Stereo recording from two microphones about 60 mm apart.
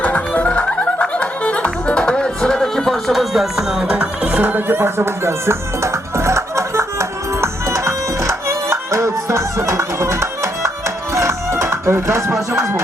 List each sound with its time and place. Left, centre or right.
0.0 s music: left; by 3.9 s centre
3.9 s music: right